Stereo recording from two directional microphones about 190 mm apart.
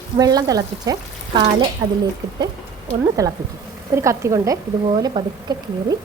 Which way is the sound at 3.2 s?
15° right (ahead or behind).